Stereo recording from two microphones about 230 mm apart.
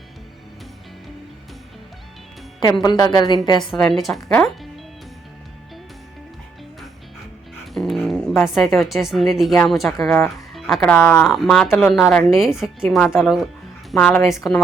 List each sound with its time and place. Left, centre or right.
2.8 s a woman's voice: centre
3.6 s speech: centre
7.7 s music: centre
9.0 s speech: centre